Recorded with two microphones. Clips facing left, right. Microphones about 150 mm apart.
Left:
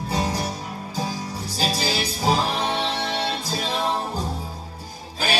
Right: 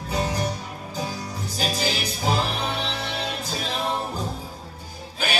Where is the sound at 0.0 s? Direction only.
35° left (ahead or behind).